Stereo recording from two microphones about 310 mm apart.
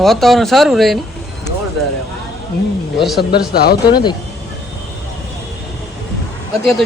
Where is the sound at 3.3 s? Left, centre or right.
Left.